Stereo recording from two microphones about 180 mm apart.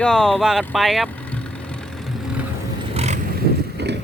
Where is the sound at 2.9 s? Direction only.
40° right (ahead or behind).